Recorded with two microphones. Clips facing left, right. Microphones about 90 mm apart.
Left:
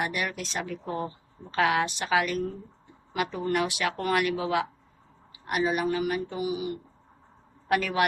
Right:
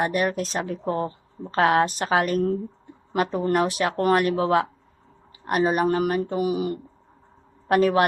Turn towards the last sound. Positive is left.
turn(degrees=-40)  # may be behind; listen again after turning